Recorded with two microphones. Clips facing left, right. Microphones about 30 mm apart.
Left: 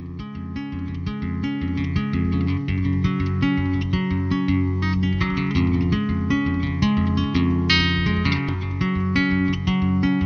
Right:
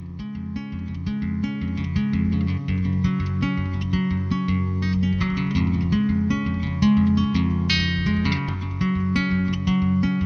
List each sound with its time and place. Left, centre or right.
2.0 s music: centre